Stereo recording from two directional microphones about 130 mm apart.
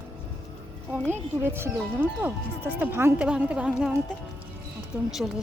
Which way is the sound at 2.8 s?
15° right (ahead or behind).